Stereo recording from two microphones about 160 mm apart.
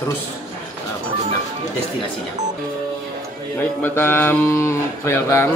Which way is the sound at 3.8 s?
15° left (ahead or behind).